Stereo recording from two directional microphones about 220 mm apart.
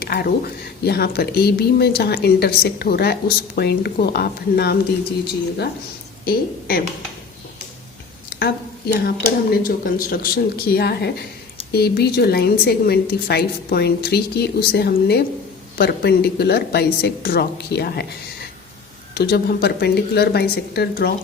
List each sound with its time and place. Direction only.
0.0 s speech: 45° left (ahead or behind)
6.2 s a woman's voice: 40° left (ahead or behind)
8.4 s speech: 45° left (ahead or behind)
19.1 s speech: 45° left (ahead or behind)